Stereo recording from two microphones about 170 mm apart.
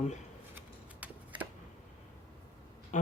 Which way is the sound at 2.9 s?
45° left (ahead or behind).